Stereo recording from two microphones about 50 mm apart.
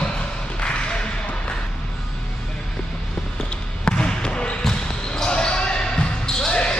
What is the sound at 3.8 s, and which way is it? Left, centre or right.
Basketball bounce, centre.